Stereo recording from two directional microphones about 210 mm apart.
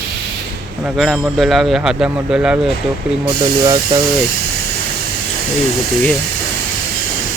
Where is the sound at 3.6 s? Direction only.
20° right (ahead or behind).